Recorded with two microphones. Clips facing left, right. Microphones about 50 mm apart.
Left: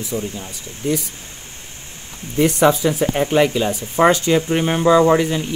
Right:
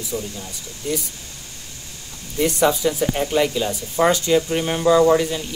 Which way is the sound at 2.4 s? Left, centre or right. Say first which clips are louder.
Left 3 dB; left.